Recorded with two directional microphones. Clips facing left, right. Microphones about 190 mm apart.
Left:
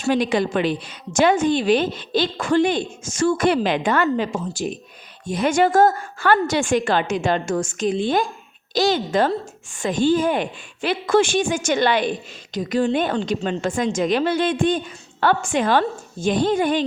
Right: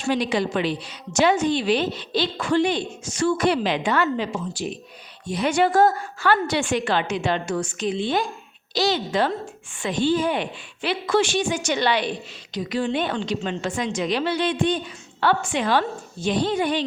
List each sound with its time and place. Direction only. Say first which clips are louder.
0.1 s a woman's voice: left 3 dB; 50° left (ahead or behind)